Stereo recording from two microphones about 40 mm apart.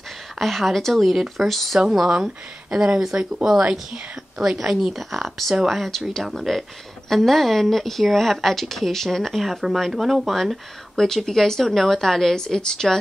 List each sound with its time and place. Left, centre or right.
0.4 s a woman's voice: centre
1.1 s a woman's voice: centre
2.0 s speech: centre
3.7 s a woman's voice: centre